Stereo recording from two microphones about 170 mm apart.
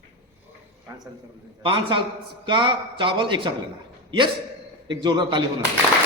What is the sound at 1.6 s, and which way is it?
A man's voice, 30° right (ahead or behind).